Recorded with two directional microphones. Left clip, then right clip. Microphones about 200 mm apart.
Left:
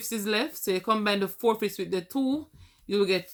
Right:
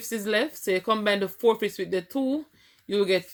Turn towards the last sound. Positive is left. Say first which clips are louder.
# right 2 dB
turn(degrees=30)  # may be behind; listen again after turning